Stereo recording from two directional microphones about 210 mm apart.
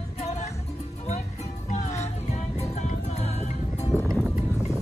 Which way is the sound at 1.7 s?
30° left (ahead or behind).